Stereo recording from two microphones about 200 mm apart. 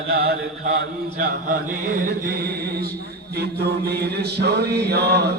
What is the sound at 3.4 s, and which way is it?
Mantra, 55° right (ahead or behind).